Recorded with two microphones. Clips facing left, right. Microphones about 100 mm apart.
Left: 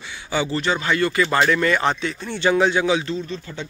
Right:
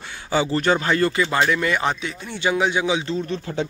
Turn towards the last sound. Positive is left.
turn(degrees=-65)  # may be behind; listen again after turning